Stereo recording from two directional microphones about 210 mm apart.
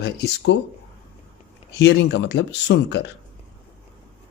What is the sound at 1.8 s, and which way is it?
Speech, 55° left (ahead or behind).